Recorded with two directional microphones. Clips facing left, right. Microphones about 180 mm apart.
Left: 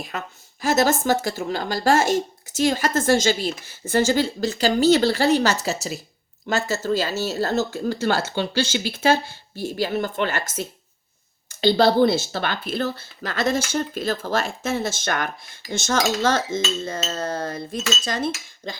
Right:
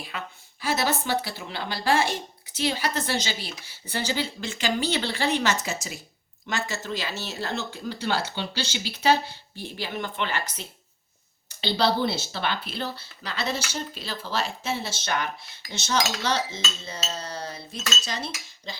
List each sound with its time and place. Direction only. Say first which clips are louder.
0.0 s a woman's voice: left 5 dB; 45° left (ahead or behind)